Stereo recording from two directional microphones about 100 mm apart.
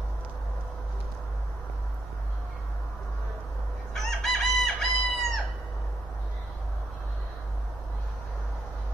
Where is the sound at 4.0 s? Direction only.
5° left (ahead or behind).